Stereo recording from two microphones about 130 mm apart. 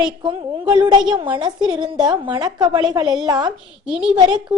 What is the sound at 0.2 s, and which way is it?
A woman's voice, 35° right (ahead or behind).